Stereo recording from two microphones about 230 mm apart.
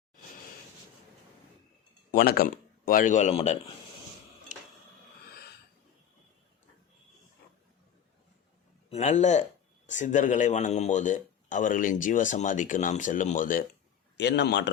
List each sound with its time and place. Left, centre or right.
2.1 s speech: left
4.5 s a sound: left
8.9 s speech: left
14.2 s a man's voice: left